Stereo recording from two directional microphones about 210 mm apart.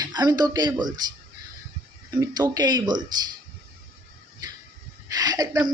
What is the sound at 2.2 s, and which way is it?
Speech, 15° right (ahead or behind).